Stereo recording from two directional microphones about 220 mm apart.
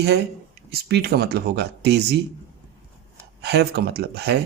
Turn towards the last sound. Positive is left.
turn(degrees=-50)  # may be behind; listen again after turning